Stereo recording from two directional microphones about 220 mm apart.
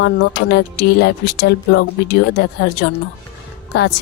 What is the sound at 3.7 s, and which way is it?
Speech, 50° left (ahead or behind).